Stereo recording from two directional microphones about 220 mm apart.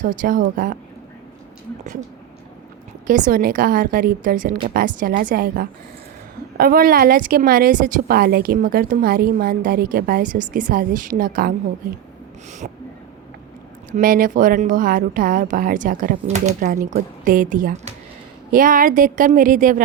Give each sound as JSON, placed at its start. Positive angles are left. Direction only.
{"t": 0.0, "sound": "a woman's voice", "side_deg": -35}
{"t": 3.1, "sound": "a woman's voice", "side_deg": -40}
{"t": 13.9, "sound": "a woman's voice", "side_deg": -40}